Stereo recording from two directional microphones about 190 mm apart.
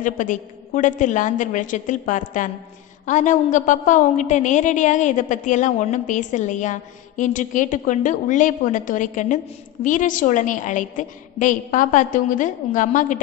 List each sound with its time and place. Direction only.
0.0 s a woman's voice: 45° left (ahead or behind)